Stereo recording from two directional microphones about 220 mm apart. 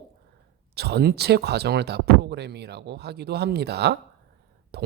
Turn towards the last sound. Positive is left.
turn(degrees=-45)  # may be behind; listen again after turning